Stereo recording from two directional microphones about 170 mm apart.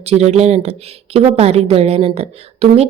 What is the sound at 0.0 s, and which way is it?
A woman's voice, 40° right (ahead or behind).